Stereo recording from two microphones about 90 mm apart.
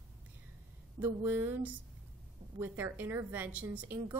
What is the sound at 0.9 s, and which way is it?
A woman's voice, 20° right (ahead or behind).